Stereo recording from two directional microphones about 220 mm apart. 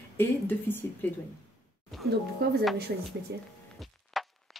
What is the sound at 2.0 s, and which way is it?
Speech, 45° right (ahead or behind).